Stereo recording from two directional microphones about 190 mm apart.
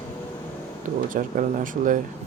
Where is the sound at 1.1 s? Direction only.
45° right (ahead or behind).